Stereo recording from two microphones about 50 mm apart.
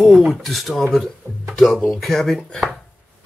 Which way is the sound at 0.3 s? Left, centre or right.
Centre.